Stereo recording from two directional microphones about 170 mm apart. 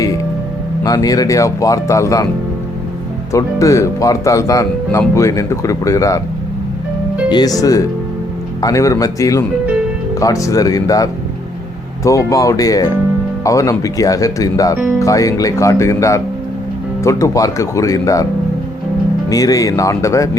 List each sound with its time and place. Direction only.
0.9 s speech: 20° left (ahead or behind)
3.3 s speech: 20° left (ahead or behind)
7.3 s speech: 25° left (ahead or behind)
19.3 s speech: 20° left (ahead or behind)